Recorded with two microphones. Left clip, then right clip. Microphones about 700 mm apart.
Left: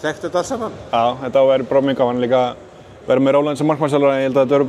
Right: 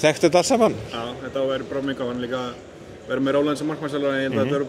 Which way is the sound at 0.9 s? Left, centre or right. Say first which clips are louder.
Left 12 dB; left.